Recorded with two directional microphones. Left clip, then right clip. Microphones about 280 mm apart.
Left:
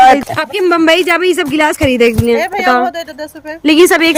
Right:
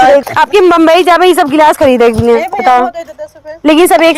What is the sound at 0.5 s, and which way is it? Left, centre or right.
Speech, centre.